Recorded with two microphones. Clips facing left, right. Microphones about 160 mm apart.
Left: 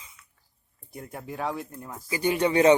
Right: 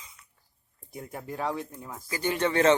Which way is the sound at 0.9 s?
Centre (ahead or behind).